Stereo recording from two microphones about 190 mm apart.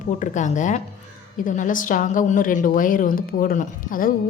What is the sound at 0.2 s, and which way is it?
Speech, 40° left (ahead or behind).